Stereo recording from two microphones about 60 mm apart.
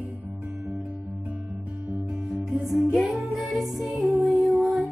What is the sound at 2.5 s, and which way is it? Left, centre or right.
Music, centre.